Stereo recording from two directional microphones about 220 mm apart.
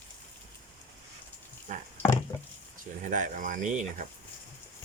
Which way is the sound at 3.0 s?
35° right (ahead or behind).